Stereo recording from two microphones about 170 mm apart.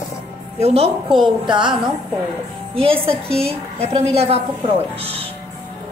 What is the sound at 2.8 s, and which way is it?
A woman's voice, 35° right (ahead or behind).